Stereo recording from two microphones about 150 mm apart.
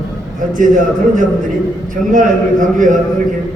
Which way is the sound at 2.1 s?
60° right (ahead or behind).